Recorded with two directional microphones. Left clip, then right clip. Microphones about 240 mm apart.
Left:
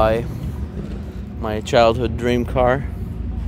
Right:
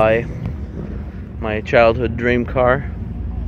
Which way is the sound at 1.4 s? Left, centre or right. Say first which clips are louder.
Right 2 dB; left.